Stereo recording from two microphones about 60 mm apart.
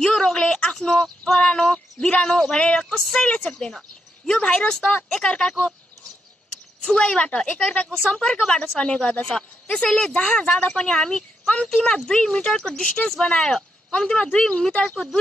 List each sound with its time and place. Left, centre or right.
0.0 s a sound: centre
1.2 s speech: centre
3.3 s speech: left
6.8 s speech: centre